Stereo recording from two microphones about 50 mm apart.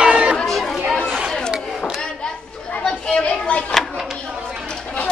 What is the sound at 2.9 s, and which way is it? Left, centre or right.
Chatter, centre.